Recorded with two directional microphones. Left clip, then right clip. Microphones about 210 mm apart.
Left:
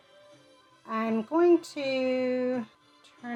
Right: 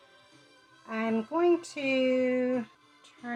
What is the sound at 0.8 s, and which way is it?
Speech, 35° left (ahead or behind).